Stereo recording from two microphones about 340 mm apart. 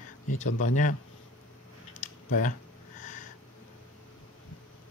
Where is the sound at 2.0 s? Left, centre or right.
Left.